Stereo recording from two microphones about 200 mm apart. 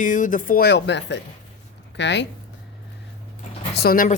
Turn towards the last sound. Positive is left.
turn(degrees=45)  # may be behind; listen again after turning